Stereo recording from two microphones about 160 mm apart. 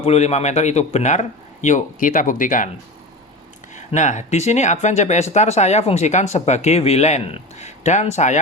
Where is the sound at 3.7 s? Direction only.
50° left (ahead or behind).